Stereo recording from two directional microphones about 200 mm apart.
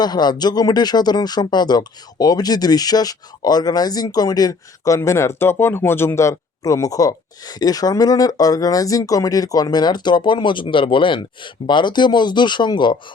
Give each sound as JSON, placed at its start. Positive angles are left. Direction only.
{"t": 0.0, "sound": "speech", "side_deg": 20}